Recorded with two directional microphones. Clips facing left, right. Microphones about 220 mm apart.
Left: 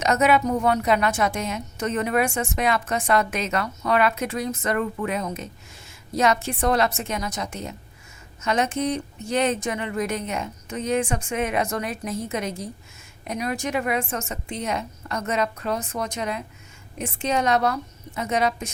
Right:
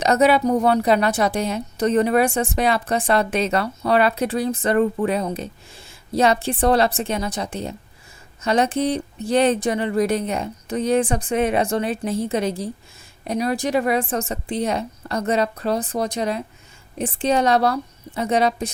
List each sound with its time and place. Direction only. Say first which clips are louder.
0.0 s a woman's voice: right 4 dB; 35° right (ahead or behind)